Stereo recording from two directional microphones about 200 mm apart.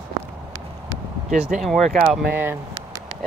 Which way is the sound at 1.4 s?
Centre (ahead or behind).